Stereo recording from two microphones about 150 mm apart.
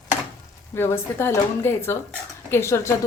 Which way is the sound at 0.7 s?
15° left (ahead or behind).